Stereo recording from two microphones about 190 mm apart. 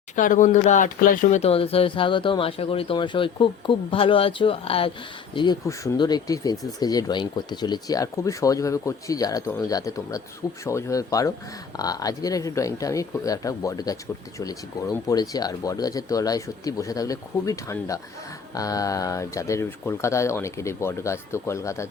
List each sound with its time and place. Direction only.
0.2 s speech: 45° left (ahead or behind); by 21.8 s 15° left (ahead or behind)